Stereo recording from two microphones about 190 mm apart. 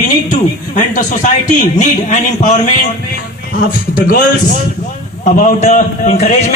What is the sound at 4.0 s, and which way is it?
Speech, 45° left (ahead or behind).